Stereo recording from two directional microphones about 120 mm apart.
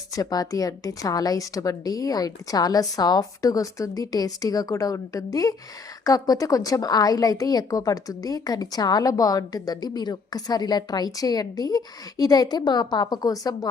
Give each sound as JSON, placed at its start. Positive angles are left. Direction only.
{"t": 0.1, "sound": "a woman's voice", "side_deg": 30}